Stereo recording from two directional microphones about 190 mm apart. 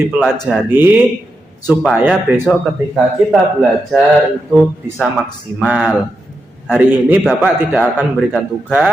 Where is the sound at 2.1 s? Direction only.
10° right (ahead or behind).